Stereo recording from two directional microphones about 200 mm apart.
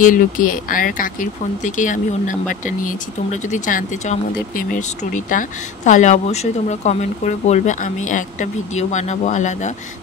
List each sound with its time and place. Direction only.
0.0 s speech: 40° left (ahead or behind)